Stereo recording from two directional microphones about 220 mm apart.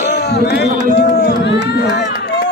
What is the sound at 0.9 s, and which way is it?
Run, 50° left (ahead or behind).